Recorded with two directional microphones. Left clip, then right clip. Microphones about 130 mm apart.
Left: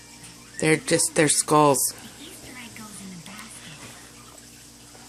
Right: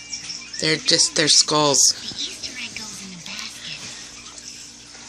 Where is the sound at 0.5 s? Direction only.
40° left (ahead or behind).